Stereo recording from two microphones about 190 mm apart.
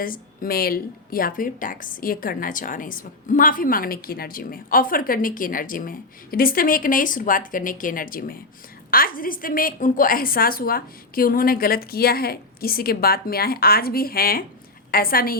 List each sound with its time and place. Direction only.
0.0 s a woman's voice: 50° left (ahead or behind)